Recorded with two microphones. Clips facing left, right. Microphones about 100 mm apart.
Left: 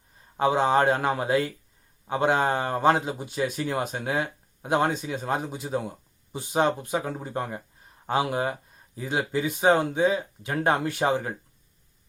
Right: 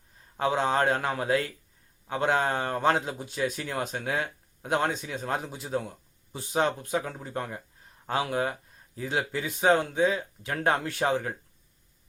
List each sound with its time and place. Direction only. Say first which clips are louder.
0.3 s a man's voice: left 4 dB; 10° left (ahead or behind)
7.1 s speech: left 6 dB; 30° left (ahead or behind)
7.3 s a man's voice: left 3 dB; 10° left (ahead or behind)